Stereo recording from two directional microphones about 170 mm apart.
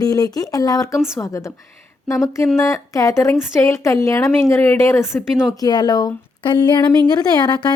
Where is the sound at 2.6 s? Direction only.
20° left (ahead or behind).